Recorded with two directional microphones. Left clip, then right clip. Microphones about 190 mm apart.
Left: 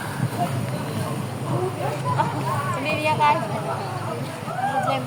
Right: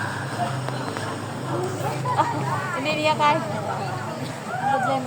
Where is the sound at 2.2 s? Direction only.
60° right (ahead or behind).